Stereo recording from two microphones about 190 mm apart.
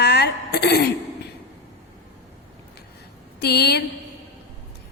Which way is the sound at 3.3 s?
60° left (ahead or behind).